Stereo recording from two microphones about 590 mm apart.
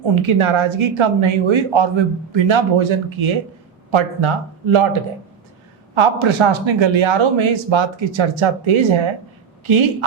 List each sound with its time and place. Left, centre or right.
0.2 s speech: right
5.9 s speech: right